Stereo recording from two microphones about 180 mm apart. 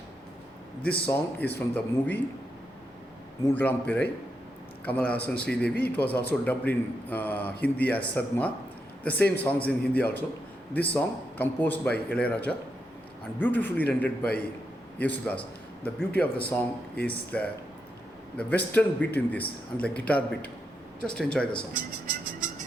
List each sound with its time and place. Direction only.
0.8 s speech: 5° left (ahead or behind)
3.5 s speech: 10° left (ahead or behind)
21.8 s speech: 50° right (ahead or behind)